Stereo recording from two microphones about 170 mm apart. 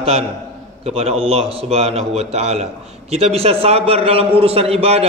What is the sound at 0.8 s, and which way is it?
A man's voice, 35° right (ahead or behind).